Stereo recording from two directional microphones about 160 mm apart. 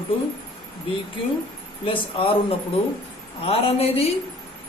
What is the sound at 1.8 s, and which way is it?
Speech, 35° left (ahead or behind).